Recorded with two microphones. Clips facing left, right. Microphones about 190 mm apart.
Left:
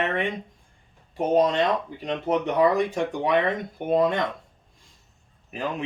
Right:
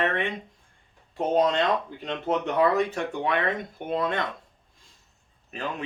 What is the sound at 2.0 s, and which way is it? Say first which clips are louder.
Speech: left 4 dB; 10° left (ahead or behind).